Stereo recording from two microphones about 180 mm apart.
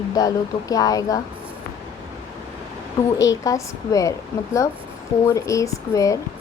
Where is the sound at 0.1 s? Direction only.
20° left (ahead or behind).